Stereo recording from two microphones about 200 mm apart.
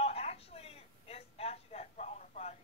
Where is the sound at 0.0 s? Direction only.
30° left (ahead or behind).